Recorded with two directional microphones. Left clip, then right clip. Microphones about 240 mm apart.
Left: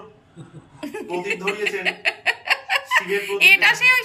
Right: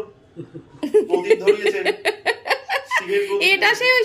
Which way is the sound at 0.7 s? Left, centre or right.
Centre.